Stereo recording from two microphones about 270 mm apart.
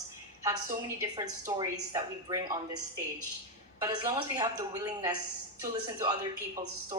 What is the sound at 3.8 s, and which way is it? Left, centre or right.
A woman's voice, centre.